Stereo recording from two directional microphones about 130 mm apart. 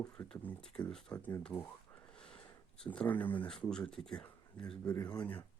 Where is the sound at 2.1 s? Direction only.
5° left (ahead or behind).